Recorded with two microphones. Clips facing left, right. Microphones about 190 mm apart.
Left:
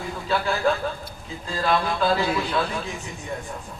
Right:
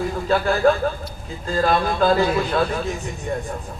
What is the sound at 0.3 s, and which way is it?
A man's voice, 45° right (ahead or behind).